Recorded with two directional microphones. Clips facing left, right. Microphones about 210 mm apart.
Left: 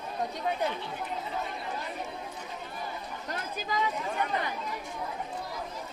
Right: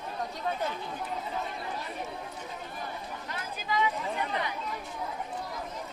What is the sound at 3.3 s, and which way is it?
Chatter, 45° left (ahead or behind).